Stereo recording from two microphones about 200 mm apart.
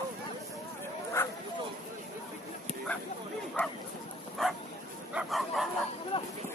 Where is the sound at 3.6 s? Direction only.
10° left (ahead or behind).